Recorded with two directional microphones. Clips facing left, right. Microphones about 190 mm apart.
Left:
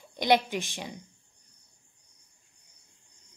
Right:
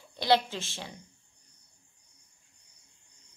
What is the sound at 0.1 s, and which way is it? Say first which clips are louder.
Speech: left 1 dB; 15° left (ahead or behind).